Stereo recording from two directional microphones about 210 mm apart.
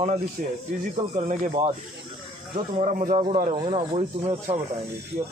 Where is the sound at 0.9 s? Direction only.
35° right (ahead or behind).